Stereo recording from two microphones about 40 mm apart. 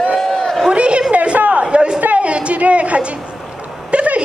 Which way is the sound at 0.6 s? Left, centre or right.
Right.